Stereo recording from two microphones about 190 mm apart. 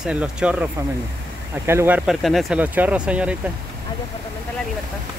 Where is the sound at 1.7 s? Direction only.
15° right (ahead or behind).